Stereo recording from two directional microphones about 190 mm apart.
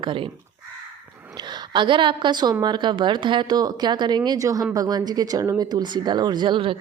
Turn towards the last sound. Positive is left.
turn(degrees=-25)  # may be behind; listen again after turning